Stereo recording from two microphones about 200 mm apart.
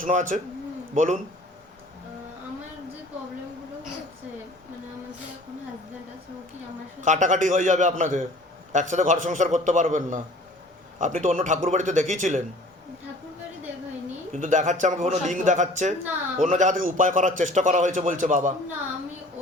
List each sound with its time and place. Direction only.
0.0 s a man's voice: 40° right (ahead or behind)
7.0 s a man's voice: 35° right (ahead or behind)
14.3 s a man's voice: 40° right (ahead or behind)